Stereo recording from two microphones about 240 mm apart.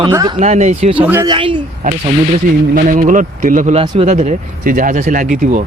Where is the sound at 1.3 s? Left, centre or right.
Right.